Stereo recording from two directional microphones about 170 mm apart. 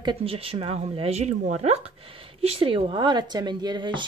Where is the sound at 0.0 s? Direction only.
30° right (ahead or behind).